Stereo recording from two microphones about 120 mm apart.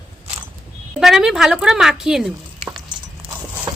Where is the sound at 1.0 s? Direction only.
5° right (ahead or behind).